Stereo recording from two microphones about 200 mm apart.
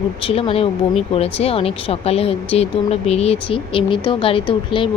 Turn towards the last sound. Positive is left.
turn(degrees=25)  # may be behind; listen again after turning